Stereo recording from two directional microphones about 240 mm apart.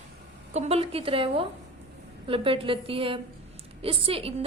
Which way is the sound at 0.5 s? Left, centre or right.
Right.